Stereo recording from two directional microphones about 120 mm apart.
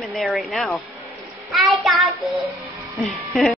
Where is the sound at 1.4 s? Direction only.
Centre (ahead or behind).